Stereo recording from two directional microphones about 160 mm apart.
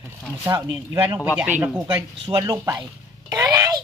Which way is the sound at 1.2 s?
5° right (ahead or behind).